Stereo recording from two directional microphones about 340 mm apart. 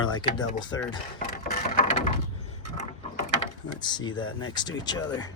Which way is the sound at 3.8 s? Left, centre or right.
Centre.